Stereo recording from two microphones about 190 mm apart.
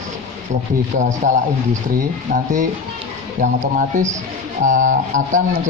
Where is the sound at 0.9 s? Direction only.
40° right (ahead or behind).